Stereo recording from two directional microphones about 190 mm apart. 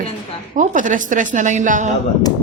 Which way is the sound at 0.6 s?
45° right (ahead or behind).